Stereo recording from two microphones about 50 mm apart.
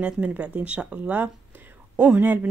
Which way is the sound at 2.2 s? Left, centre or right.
Right.